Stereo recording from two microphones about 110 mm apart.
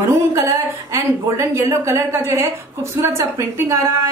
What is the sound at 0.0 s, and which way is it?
A woman's voice, 25° right (ahead or behind).